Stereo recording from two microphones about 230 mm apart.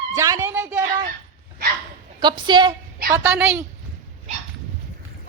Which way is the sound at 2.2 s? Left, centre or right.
Centre.